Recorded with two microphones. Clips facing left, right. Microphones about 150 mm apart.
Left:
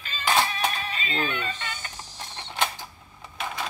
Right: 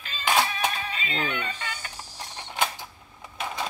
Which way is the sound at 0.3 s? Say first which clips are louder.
Even; 10° right (ahead or behind).